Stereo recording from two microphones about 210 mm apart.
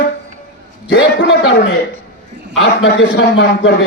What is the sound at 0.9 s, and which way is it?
A man's voice, 55° left (ahead or behind).